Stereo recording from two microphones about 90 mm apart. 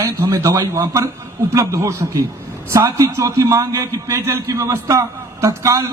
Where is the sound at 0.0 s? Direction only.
35° right (ahead or behind).